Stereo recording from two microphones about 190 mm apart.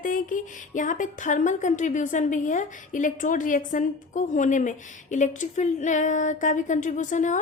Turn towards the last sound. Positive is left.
turn(degrees=40)  # may be behind; listen again after turning